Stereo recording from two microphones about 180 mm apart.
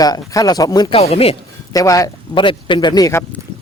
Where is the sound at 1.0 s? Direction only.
35° left (ahead or behind).